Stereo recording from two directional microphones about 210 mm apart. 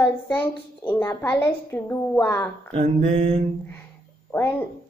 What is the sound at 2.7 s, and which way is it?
Mantra, 30° right (ahead or behind).